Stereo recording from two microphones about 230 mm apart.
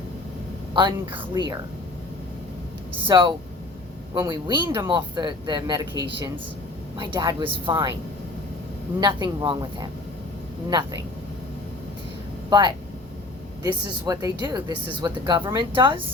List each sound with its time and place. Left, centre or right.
0.7 s speech: right
3.1 s speech: right
9.0 s speech: centre
12.5 s speech: centre